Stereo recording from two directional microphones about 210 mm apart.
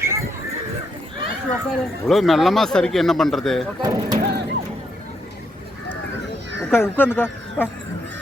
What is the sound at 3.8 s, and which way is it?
Speech, 15° right (ahead or behind).